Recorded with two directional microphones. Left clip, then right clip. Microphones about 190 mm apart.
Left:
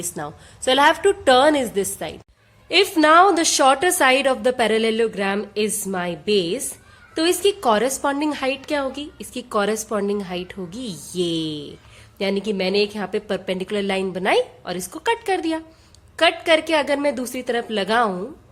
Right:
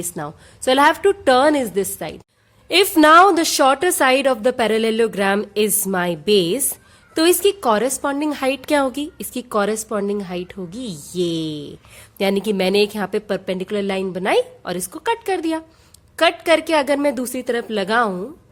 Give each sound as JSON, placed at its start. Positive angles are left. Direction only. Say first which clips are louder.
{"t": 0.0, "sound": "a woman's voice", "louder": "right 1 dB", "side_deg": -30}
{"t": 12.2, "sound": "a woman's voice", "louder": "right 4 dB", "side_deg": -40}